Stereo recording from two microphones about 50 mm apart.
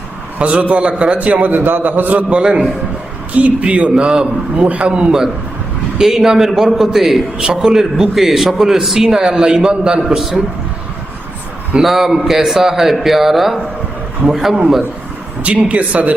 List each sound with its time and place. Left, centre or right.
0.3 s a man's voice: right
2.3 s a man's voice: right
6.0 s a man's voice: centre
7.3 s a man's voice: centre
10.0 s a man's voice: centre
11.8 s a man's voice: centre
15.4 s a man's voice: right